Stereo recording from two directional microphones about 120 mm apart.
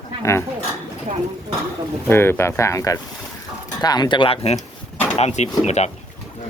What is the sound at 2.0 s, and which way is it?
Speech, 20° left (ahead or behind).